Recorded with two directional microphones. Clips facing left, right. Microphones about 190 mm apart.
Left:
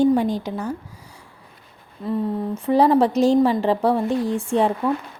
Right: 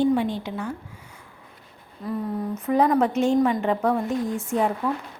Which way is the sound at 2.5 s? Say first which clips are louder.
Left 4 dB; 30° left (ahead or behind).